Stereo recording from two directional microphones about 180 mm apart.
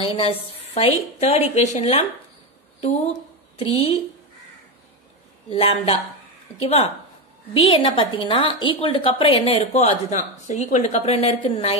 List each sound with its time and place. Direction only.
0.0 s a woman's voice: 30° left (ahead or behind)
5.5 s a woman's voice: 30° left (ahead or behind)